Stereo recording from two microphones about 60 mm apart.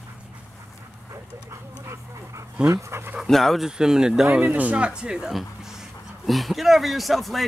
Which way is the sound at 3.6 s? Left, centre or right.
Centre.